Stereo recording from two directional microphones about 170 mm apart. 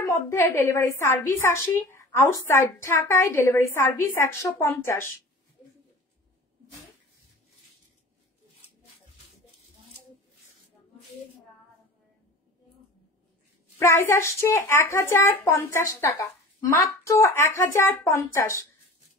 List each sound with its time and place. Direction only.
0.0 s a woman's voice: 15° left (ahead or behind)
13.7 s a woman's voice: 15° left (ahead or behind)